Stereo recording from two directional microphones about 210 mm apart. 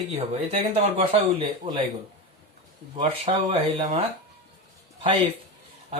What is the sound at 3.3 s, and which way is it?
Speech, 35° right (ahead or behind).